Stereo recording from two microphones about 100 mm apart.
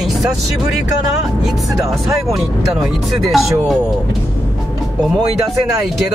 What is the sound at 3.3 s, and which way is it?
Speech, centre (ahead or behind).